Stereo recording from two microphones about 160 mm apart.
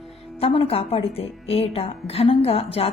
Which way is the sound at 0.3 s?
35° left (ahead or behind).